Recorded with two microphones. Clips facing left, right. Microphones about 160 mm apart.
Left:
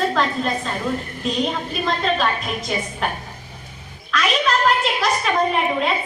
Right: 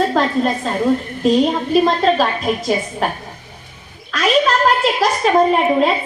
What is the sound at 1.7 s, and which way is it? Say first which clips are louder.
A woman's voice: right 10 dB; 40° right (ahead or behind).